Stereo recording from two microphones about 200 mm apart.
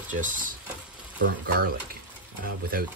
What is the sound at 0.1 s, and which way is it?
Speech, 40° right (ahead or behind).